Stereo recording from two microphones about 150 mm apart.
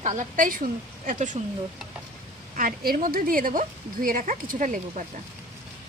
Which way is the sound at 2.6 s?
75° right (ahead or behind).